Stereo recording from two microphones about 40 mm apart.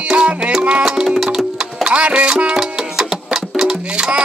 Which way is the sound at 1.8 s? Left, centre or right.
Right.